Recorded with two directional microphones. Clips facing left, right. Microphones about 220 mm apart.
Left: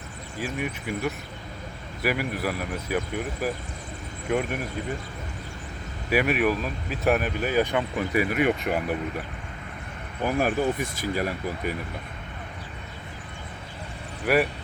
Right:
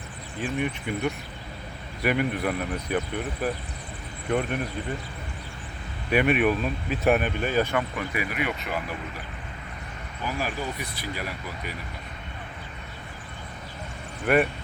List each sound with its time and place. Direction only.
0.3 s speech: 5° left (ahead or behind)
6.1 s speech: 5° left (ahead or behind)
7.9 s speech: 40° left (ahead or behind)
10.2 s speech: 50° left (ahead or behind)
14.3 s speech: 5° left (ahead or behind)